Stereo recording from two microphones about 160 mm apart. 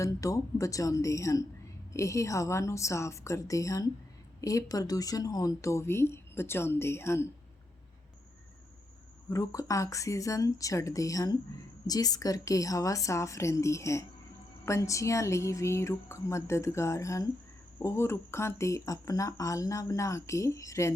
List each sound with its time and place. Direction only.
0.0 s speech: 20° left (ahead or behind)
9.3 s speech: 20° left (ahead or behind)